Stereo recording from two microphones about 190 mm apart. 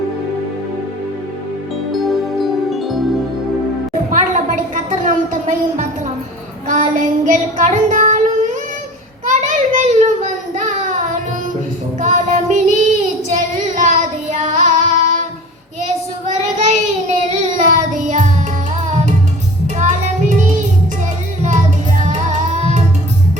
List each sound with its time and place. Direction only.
1.9 s music: centre (ahead or behind)
4.1 s a sound: 40° right (ahead or behind)
6.7 s child singing: 40° right (ahead or behind)
9.2 s child singing: 40° right (ahead or behind)
11.9 s child singing: 40° right (ahead or behind)
16.3 s child singing: 40° right (ahead or behind)
19.7 s music: 40° right (ahead or behind)